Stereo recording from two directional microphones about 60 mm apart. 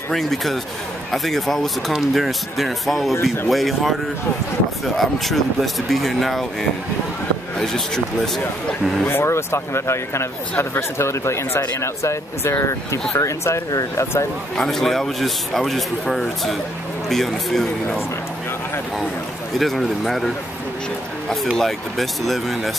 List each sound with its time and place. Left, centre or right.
0.1 s speech: centre
7.5 s speech: centre
9.0 s speech: left
14.6 s speech: centre
19.6 s speech: centre
21.5 s speech: centre